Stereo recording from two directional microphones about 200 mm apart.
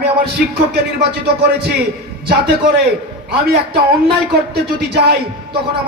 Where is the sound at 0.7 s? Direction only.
55° right (ahead or behind).